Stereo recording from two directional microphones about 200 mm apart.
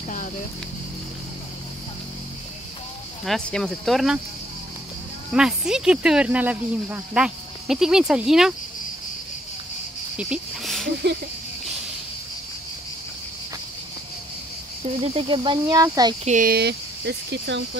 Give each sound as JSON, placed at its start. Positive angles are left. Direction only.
{"t": 3.3, "sound": "speech", "side_deg": 5}
{"t": 5.3, "sound": "speech", "side_deg": -5}
{"t": 10.1, "sound": "cricket", "side_deg": -5}
{"t": 15.0, "sound": "speech", "side_deg": -30}
{"t": 16.3, "sound": "speech", "side_deg": -45}